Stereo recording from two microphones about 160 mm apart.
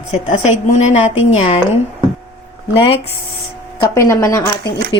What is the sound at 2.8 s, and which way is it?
Speech, 35° left (ahead or behind).